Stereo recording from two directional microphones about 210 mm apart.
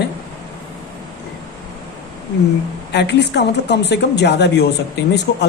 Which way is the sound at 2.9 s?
55° left (ahead or behind).